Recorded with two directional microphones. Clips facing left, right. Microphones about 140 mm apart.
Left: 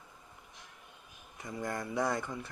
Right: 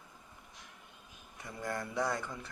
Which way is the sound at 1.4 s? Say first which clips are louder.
Left 2 dB; 20° left (ahead or behind).